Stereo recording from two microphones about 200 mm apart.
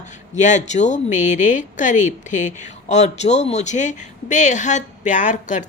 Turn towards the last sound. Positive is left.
turn(degrees=40)  # may be behind; listen again after turning